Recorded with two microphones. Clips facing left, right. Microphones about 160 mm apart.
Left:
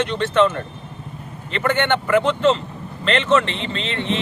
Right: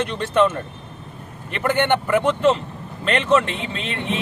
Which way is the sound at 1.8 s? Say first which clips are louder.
Even; 10° right (ahead or behind).